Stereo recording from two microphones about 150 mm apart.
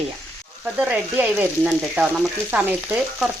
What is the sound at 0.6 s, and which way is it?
Frying, 10° right (ahead or behind).